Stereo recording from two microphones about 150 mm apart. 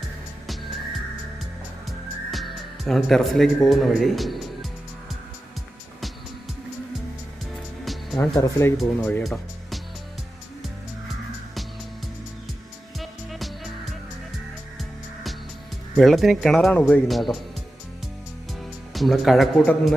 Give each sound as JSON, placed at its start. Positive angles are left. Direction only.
{"t": 2.3, "sound": "speech", "side_deg": 0}
{"t": 7.9, "sound": "music", "side_deg": 0}
{"t": 8.3, "sound": "speech", "side_deg": 20}
{"t": 9.2, "sound": "music", "side_deg": 0}
{"t": 13.0, "sound": "music", "side_deg": 0}
{"t": 14.8, "sound": "music", "side_deg": 0}
{"t": 16.0, "sound": "speech", "side_deg": 0}
{"t": 18.9, "sound": "speech", "side_deg": 0}